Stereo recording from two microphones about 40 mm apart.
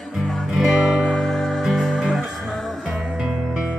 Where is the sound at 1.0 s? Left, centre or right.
Centre.